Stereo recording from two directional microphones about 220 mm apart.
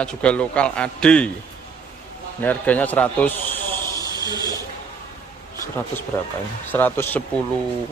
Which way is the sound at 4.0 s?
20° right (ahead or behind).